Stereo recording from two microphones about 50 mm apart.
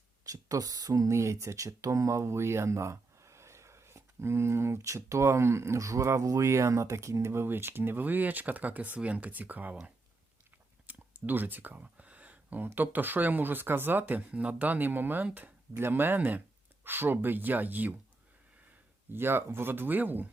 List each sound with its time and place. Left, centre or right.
0.5 s speech: right
7.4 s speech: right
10.8 s speech: right
19.1 s speech: right